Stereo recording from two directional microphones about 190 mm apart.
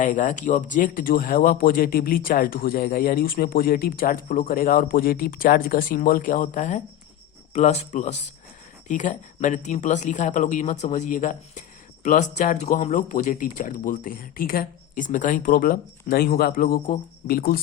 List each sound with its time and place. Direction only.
0.0 s speech: 40° left (ahead or behind)